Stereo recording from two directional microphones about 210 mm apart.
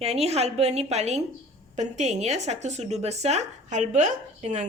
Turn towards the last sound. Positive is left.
turn(degrees=-35)  # may be behind; listen again after turning